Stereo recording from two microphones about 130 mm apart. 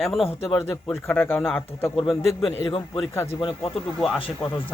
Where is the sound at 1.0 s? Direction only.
15° left (ahead or behind).